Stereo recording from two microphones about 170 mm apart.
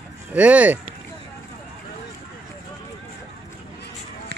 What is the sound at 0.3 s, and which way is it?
Speech, 10° right (ahead or behind).